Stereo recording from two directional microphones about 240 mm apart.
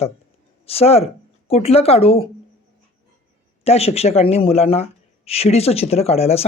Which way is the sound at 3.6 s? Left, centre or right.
Left.